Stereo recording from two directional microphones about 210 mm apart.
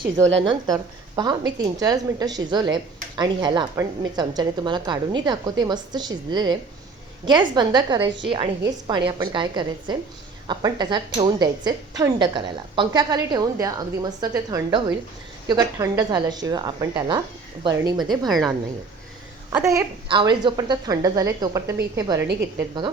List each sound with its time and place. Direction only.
0.2 s a woman's voice: 15° right (ahead or behind)
18.3 s a woman's voice: centre (ahead or behind)
19.5 s a woman's voice: 15° right (ahead or behind)